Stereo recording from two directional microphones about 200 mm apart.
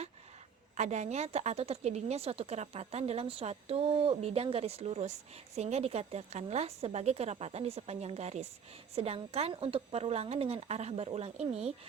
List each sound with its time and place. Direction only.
0.8 s a woman's voice: 35° right (ahead or behind)